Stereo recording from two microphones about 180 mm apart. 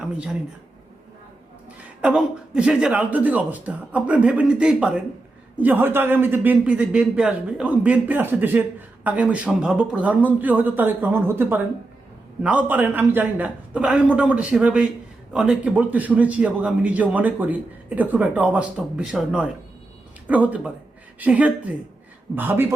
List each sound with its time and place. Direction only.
2.0 s a man's voice: 5° right (ahead or behind)